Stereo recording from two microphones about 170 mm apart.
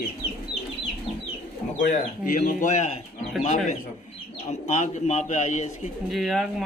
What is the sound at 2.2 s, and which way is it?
Speech, 55° left (ahead or behind).